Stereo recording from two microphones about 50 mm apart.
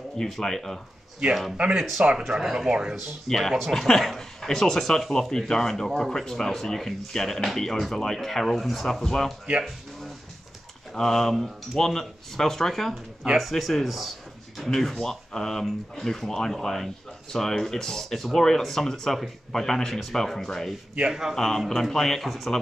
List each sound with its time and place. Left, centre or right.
0.2 s speech: centre
1.6 s speech: centre
2.1 s speech: centre
3.3 s speech: centre
10.9 s speech: centre
21.1 s speech: centre
21.4 s speech: centre